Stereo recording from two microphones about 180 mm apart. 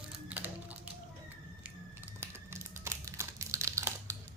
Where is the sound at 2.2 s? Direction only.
15° right (ahead or behind).